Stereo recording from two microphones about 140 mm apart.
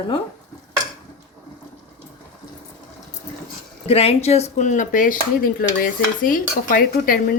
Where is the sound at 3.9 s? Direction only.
45° left (ahead or behind); by 5.6 s 80° left.